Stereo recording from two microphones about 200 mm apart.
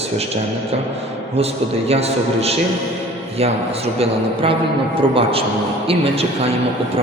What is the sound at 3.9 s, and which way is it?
A man's voice, 30° right (ahead or behind).